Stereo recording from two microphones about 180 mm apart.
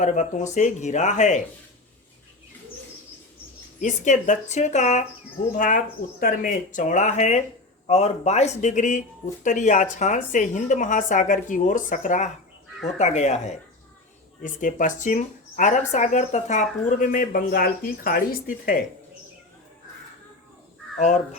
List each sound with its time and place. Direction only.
0.0 s a woman's voice: 45° left (ahead or behind)
3.8 s a woman's voice: 45° left (ahead or behind)